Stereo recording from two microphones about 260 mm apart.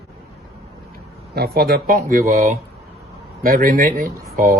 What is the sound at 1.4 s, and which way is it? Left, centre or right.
Speech, right.